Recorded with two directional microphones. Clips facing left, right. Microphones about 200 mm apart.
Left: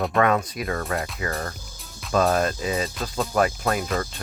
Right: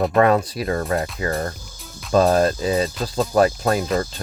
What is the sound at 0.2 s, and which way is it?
Speech, 35° right (ahead or behind).